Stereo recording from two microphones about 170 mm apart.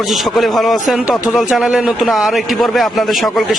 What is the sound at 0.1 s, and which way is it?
A man's voice, centre (ahead or behind).